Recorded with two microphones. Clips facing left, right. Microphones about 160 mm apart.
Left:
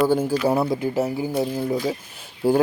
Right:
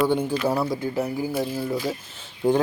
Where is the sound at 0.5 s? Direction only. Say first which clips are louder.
Left 3 dB; 20° left (ahead or behind).